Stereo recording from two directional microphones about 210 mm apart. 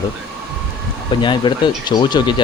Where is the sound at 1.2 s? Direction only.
20° left (ahead or behind).